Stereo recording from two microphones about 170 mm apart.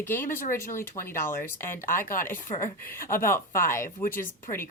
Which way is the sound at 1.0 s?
25° left (ahead or behind).